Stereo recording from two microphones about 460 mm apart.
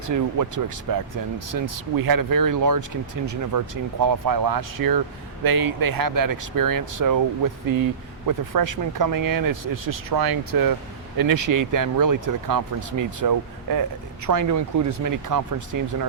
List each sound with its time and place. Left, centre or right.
0.1 s speech: right